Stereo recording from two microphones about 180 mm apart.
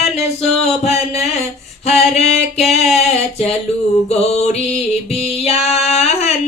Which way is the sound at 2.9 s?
35° left (ahead or behind).